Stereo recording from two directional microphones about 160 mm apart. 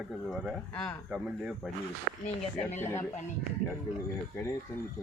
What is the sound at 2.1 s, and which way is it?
Speech, 55° right (ahead or behind).